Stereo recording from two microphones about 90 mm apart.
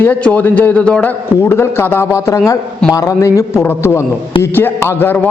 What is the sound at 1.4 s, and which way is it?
A man's voice, 25° left (ahead or behind).